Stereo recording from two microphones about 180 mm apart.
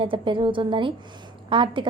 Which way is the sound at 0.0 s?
30° right (ahead or behind).